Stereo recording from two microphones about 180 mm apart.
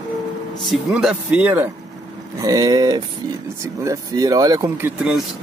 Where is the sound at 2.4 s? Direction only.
20° right (ahead or behind).